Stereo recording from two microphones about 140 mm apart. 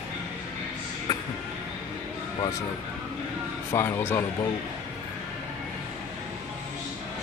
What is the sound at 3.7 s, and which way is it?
Speech, 15° left (ahead or behind).